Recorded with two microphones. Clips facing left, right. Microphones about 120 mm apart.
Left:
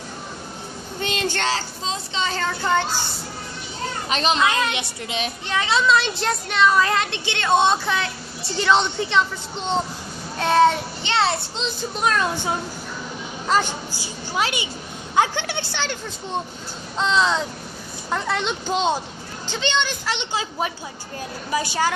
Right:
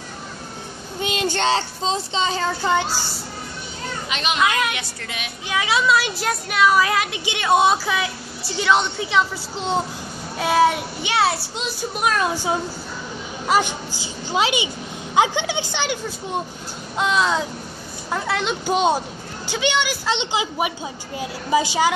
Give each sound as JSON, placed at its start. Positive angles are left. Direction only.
{"t": 1.0, "sound": "speech", "side_deg": -10}
{"t": 1.5, "sound": "a child's voice", "side_deg": -25}
{"t": 2.3, "sound": "speech", "side_deg": -15}
{"t": 4.1, "sound": "a child's voice", "side_deg": 35}
{"t": 5.5, "sound": "a woman's voice", "side_deg": -10}
{"t": 18.7, "sound": "speech", "side_deg": -15}